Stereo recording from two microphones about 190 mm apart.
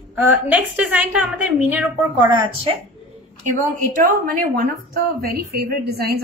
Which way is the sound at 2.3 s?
20° right (ahead or behind).